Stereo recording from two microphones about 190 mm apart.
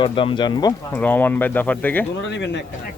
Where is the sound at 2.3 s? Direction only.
65° left (ahead or behind).